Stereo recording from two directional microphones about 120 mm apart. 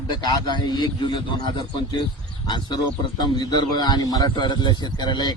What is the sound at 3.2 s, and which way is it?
A man's voice, 35° left (ahead or behind).